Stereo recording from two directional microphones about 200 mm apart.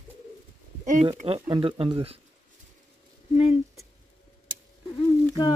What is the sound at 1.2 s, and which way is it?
Speech, 30° right (ahead or behind).